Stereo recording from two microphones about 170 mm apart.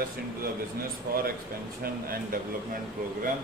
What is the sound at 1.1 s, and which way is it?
Speech, 60° right (ahead or behind).